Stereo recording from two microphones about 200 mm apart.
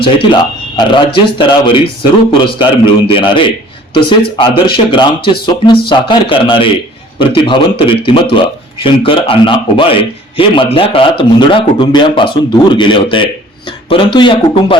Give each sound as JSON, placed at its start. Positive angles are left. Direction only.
{"t": 0.0, "sound": "a man's voice", "side_deg": 25}